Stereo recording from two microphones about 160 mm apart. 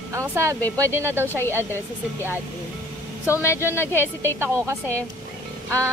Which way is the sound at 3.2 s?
15° left (ahead or behind).